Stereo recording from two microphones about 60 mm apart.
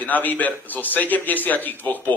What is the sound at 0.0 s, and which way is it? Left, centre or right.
A man's voice, left.